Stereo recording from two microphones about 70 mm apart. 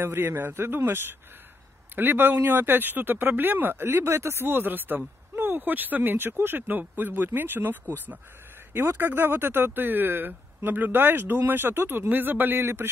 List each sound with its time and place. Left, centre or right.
0.0 s a man's voice: right